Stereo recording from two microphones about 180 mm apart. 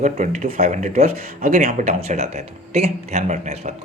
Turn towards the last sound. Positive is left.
turn(degrees=-40)  # may be behind; listen again after turning